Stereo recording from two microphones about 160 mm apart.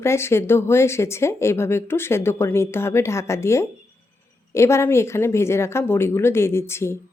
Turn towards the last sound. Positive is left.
turn(degrees=15)  # may be behind; listen again after turning